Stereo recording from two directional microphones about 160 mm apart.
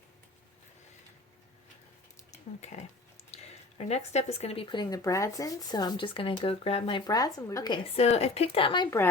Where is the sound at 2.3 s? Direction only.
45° left (ahead or behind); by 8.9 s 30° left (ahead or behind).